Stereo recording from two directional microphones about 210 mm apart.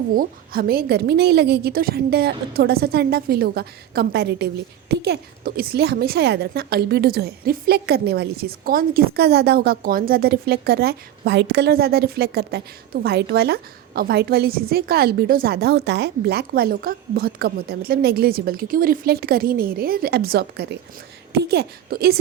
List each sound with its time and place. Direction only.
0.1 s a woman's voice: 45° right (ahead or behind)